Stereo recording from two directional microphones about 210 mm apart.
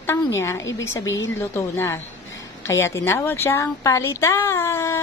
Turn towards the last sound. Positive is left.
turn(degrees=10)  # may be behind; listen again after turning